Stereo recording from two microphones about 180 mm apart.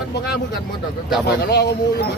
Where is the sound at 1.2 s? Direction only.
65° left (ahead or behind).